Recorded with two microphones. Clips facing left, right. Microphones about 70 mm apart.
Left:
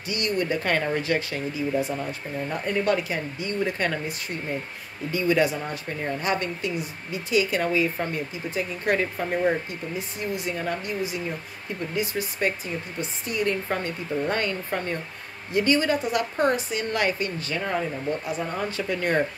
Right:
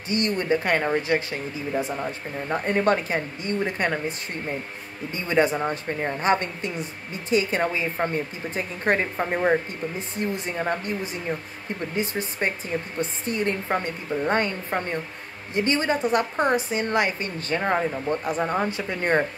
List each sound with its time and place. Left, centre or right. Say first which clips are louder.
0.1 s a woman's voice: right 3 dB; right
2.5 s a woman's voice: right 3 dB; right
3.5 s a woman's voice: right 1 dB; right
5.1 s a woman's voice: even; right
17.4 s a woman's voice: right 4 dB; right
18.7 s a woman's voice: right 1 dB; right